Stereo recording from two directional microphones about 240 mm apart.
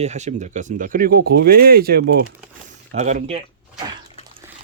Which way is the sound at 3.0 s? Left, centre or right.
Right.